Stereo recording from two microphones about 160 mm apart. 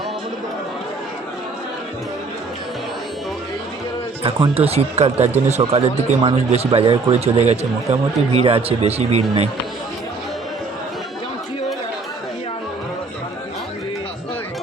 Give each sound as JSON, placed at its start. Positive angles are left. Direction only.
{"t": 4.2, "sound": "speech", "side_deg": -35}